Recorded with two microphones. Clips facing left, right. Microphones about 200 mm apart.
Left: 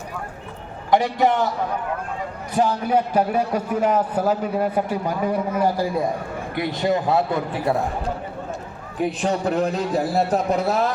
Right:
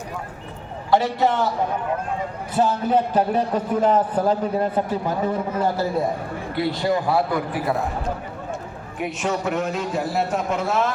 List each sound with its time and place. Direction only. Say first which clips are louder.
0.9 s a man's voice: left 1 dB; 15° left (ahead or behind)
2.6 s a man's voice: even; 15° left (ahead or behind)
9.0 s a man's voice: left 3 dB; 35° left (ahead or behind)